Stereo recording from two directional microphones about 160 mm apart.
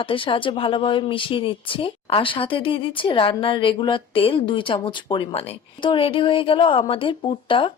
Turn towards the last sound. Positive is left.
turn(degrees=30)  # may be behind; listen again after turning